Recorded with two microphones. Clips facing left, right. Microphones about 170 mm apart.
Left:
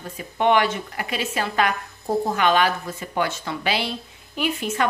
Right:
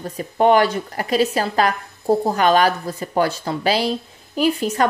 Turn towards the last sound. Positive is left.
turn(degrees=-35)  # may be behind; listen again after turning